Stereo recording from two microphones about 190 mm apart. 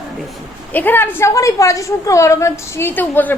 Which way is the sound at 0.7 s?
10° left (ahead or behind).